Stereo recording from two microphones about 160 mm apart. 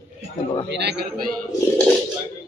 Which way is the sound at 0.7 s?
90° right.